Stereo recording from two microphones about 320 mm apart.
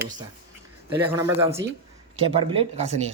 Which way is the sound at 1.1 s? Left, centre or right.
Centre.